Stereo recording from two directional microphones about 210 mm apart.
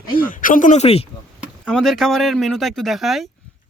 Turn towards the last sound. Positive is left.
turn(degrees=0)  # may be behind; listen again after turning